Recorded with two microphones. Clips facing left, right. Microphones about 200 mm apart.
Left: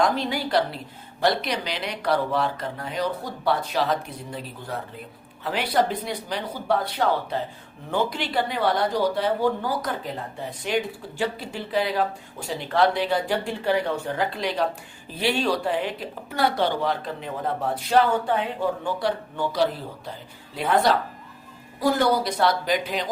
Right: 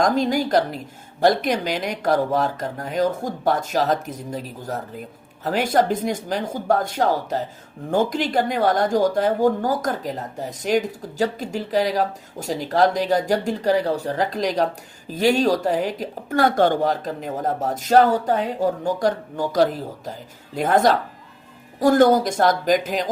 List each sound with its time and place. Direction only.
0.0 s speech: 45° right (ahead or behind)